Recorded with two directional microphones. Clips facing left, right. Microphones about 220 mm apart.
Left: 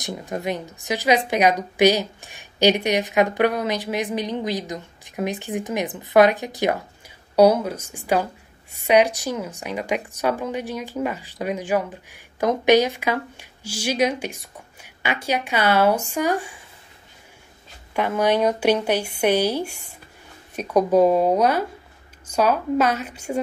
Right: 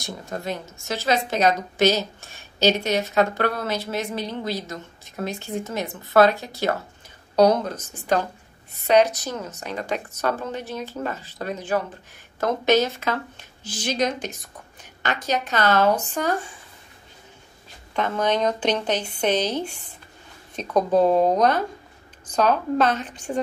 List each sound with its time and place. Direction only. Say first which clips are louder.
0.0 s speech: left 4 dB; 15° left (ahead or behind)
17.9 s speech: left 3 dB; 10° left (ahead or behind)